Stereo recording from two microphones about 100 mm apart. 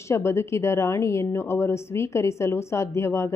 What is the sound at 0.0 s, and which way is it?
A woman's voice, 25° left (ahead or behind).